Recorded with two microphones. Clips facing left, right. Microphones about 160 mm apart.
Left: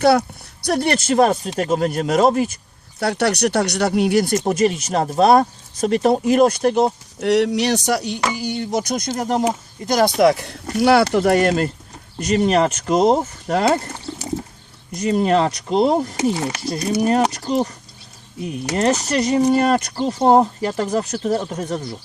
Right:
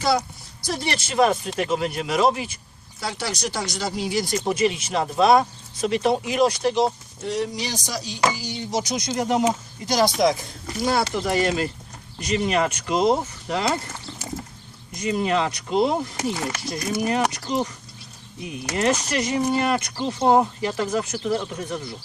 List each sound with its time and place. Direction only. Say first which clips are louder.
0.0 s speech: left 7 dB; 60° left (ahead or behind); by 2.6 s 45° left (ahead or behind)
3.0 s speech: left 10 dB; 65° left (ahead or behind)
4.4 s speech: left 4 dB; 45° left (ahead or behind)
12.2 s speech: left 6 dB; 40° left (ahead or behind)
14.1 s a sound: left 8 dB; 45° left (ahead or behind)
15.0 s speech: left 6 dB; 40° left (ahead or behind)
16.1 s speech: left 6 dB; 25° left (ahead or behind); by 17.7 s 45° left (ahead or behind)
18.7 s speech: left 4 dB; 35° left (ahead or behind)